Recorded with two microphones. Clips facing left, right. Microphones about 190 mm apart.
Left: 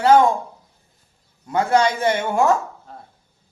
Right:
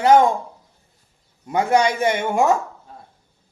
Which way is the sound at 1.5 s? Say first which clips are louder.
Even; 15° right (ahead or behind).